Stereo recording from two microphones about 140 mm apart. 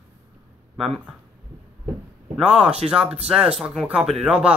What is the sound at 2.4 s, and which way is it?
Speech, centre (ahead or behind).